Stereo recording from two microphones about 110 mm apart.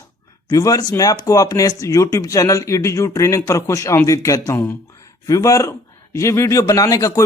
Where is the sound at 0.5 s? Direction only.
35° left (ahead or behind).